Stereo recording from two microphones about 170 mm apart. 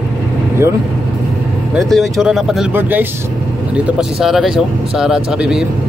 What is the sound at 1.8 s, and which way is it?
Speech, centre (ahead or behind).